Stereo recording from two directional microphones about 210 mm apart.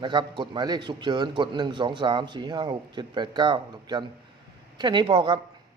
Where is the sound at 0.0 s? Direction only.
20° right (ahead or behind).